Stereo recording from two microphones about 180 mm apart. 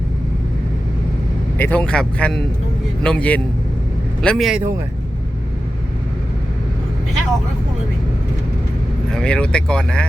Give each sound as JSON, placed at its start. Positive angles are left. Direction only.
{"t": 1.5, "sound": "speech", "side_deg": 10}
{"t": 9.0, "sound": "speech", "side_deg": 5}